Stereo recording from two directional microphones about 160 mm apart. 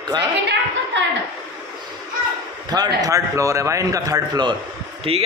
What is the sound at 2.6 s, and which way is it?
A man's voice, 25° right (ahead or behind).